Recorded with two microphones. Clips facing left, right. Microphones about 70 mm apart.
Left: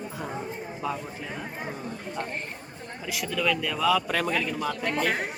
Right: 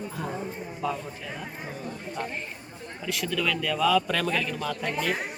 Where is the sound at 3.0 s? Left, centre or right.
Centre.